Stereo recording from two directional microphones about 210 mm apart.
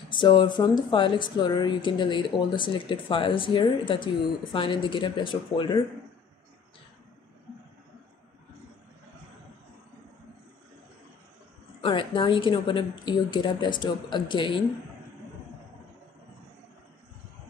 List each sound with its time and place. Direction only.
0.1 s speech: 20° left (ahead or behind)
11.8 s speech: 25° left (ahead or behind)